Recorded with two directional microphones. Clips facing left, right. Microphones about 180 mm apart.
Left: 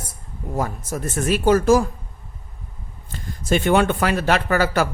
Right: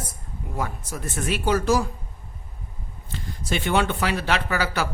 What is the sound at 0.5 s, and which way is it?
Speech, 45° left (ahead or behind).